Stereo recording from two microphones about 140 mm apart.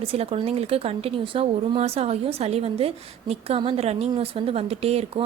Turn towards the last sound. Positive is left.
turn(degrees=-45)  # may be behind; listen again after turning